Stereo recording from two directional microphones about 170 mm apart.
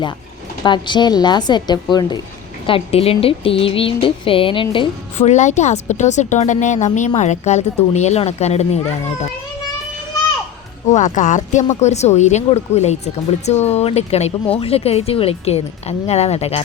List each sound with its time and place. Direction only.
0.6 s speech: 25° left (ahead or behind)
5.2 s speech: 45° left (ahead or behind)
10.8 s speech: 45° left (ahead or behind)